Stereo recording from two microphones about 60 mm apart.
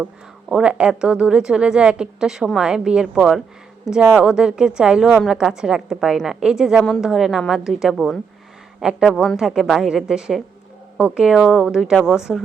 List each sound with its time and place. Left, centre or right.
0.0 s speech: centre
9.0 s speech: centre
9.4 s speech: centre
10.9 s speech: right
11.2 s speech: centre
12.3 s speech: centre